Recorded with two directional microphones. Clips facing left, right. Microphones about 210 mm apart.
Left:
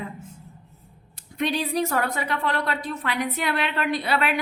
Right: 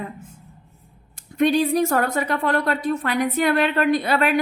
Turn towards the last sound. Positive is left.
turn(degrees=-45)  # may be behind; listen again after turning